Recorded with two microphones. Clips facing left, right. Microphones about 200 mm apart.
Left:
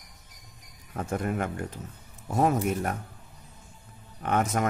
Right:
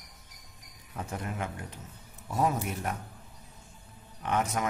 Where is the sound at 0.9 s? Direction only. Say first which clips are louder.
Left 7 dB; 50° left (ahead or behind).